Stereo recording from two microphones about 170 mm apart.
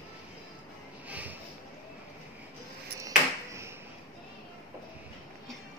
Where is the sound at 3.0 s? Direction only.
15° right (ahead or behind).